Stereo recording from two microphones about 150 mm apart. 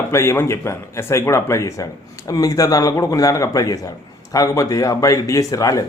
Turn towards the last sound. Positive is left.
turn(degrees=20)  # may be behind; listen again after turning